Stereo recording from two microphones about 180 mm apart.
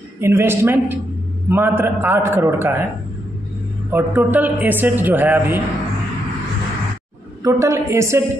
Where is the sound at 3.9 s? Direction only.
10° right (ahead or behind).